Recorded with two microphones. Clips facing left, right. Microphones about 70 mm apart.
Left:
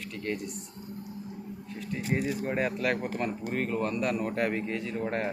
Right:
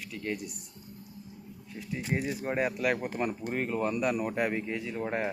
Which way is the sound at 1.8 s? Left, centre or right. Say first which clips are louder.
Left 2 dB; centre.